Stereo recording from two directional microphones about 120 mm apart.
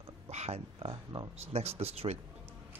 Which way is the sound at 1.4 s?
60° right (ahead or behind).